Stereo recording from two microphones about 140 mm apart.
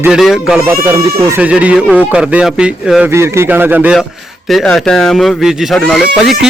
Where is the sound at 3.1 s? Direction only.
20° right (ahead or behind).